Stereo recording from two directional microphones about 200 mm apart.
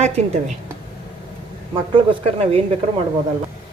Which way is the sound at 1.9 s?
25° right (ahead or behind).